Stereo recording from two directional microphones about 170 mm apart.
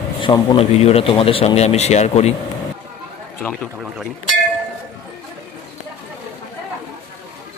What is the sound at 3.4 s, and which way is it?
Speech, 10° left (ahead or behind).